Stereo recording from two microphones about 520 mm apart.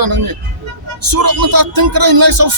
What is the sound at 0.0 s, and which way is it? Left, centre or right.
Speech, right.